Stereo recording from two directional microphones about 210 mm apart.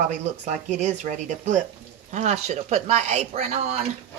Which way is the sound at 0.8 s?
35° right (ahead or behind).